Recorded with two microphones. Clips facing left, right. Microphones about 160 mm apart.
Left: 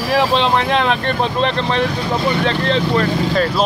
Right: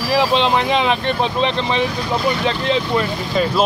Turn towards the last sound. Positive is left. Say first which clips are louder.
# left 1 dB
turn(degrees=-5)  # may be behind; listen again after turning